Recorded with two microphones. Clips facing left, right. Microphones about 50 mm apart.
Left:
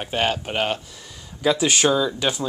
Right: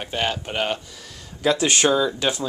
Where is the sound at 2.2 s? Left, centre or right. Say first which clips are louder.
Even; centre.